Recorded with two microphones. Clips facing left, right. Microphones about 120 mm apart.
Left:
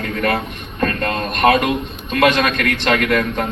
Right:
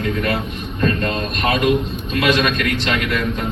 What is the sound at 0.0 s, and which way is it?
A man's voice, 50° left (ahead or behind).